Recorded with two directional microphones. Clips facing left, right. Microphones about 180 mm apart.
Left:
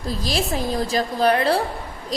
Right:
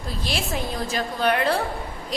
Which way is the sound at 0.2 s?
40° left (ahead or behind).